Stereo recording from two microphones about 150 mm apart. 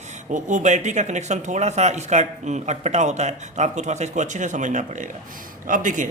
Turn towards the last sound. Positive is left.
turn(degrees=-60)  # may be behind; listen again after turning